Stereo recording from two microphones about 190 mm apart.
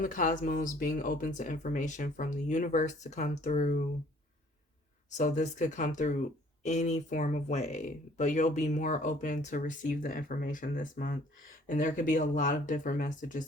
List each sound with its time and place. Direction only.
0.0 s speech: 45° left (ahead or behind)
5.1 s speech: 40° left (ahead or behind)